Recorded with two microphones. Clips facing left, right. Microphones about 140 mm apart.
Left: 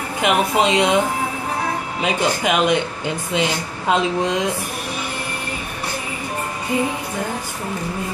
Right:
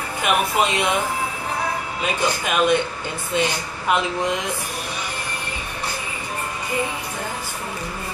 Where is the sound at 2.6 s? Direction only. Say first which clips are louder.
Even; 15° left (ahead or behind).